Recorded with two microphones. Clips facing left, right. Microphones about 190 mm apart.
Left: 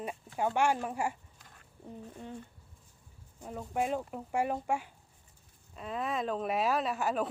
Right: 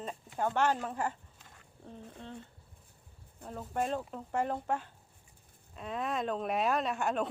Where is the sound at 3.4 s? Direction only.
10° left (ahead or behind).